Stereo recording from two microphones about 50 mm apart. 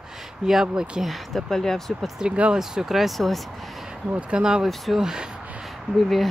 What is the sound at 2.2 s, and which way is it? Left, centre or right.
Speech, right.